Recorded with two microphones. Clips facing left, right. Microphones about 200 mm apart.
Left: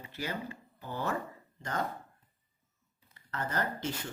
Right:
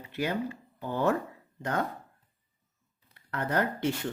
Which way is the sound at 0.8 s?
55° right (ahead or behind).